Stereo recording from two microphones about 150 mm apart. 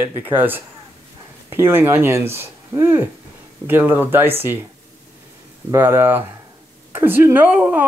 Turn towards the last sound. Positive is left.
turn(degrees=-10)  # may be behind; listen again after turning